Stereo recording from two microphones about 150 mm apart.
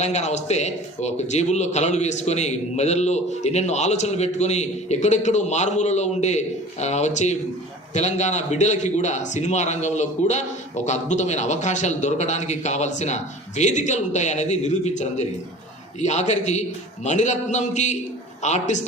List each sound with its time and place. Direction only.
0.0 s a man's voice: 50° left (ahead or behind)